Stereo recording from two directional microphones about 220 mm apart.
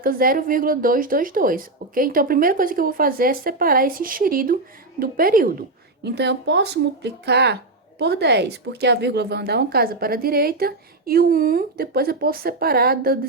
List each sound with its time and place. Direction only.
0.0 s speech: 40° right (ahead or behind)